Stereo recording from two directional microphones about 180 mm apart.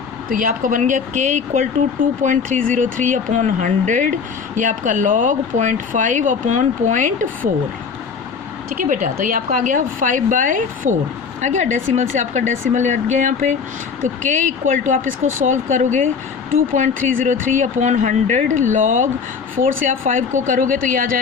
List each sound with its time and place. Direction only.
0.3 s speech: 50° right (ahead or behind)
8.7 s speech: 45° right (ahead or behind)